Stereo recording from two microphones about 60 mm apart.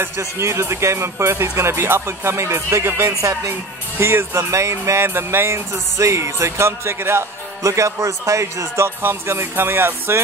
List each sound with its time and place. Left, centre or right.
0.2 s music: right
3.1 s speech: right
4.0 s music: right
5.0 s music: right